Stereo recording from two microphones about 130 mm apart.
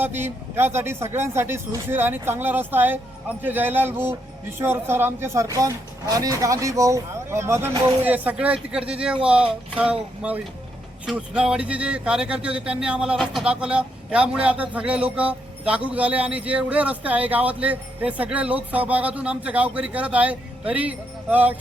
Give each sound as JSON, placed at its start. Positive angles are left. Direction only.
{"t": 0.0, "sound": "speech", "side_deg": -15}